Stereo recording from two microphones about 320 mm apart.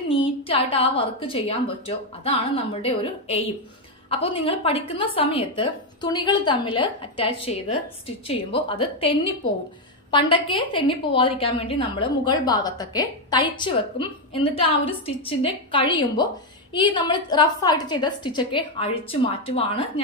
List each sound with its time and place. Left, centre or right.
0.1 s a woman's voice: centre
10.1 s a woman's voice: centre